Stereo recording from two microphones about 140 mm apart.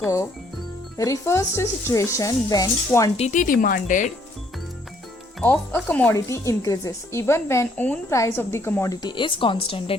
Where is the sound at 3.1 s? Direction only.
60° left (ahead or behind).